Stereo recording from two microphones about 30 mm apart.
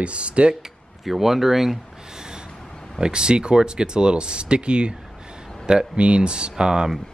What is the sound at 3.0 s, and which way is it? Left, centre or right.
Speech, right.